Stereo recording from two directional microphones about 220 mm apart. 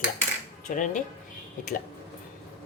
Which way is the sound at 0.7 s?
35° left (ahead or behind).